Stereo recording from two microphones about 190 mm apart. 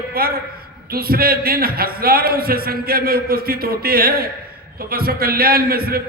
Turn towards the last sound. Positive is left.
turn(degrees=-50)  # may be behind; listen again after turning